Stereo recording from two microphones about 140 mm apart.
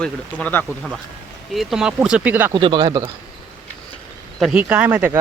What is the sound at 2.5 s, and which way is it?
Speech, 30° right (ahead or behind).